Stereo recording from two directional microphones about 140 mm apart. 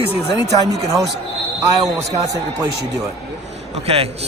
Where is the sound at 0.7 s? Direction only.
25° right (ahead or behind).